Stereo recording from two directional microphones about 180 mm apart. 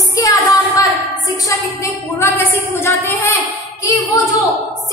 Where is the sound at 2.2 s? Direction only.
15° left (ahead or behind).